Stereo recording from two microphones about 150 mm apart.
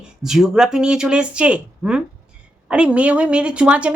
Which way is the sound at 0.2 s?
Centre (ahead or behind).